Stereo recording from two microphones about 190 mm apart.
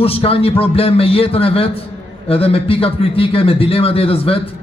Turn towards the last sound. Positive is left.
turn(degrees=30)  # may be behind; listen again after turning